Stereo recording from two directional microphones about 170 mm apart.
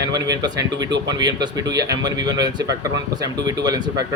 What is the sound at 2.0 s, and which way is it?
Speech, 25° right (ahead or behind).